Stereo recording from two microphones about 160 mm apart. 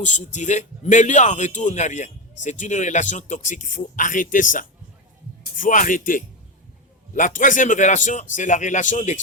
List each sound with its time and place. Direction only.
0.0 s a man's voice: 50° left (ahead or behind)